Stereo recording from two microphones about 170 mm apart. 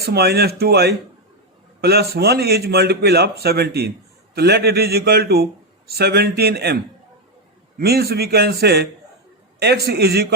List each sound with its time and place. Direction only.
0.0 s a man's voice: 70° right (ahead or behind)
7.8 s a man's voice: 70° right (ahead or behind)